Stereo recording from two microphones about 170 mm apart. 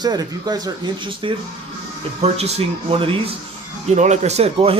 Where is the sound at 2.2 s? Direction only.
40° right (ahead or behind).